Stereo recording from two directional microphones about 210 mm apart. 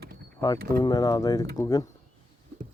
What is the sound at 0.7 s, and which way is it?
Speech, 20° left (ahead or behind).